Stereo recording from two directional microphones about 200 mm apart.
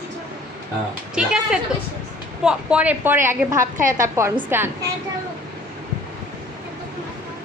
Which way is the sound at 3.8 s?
40° right (ahead or behind).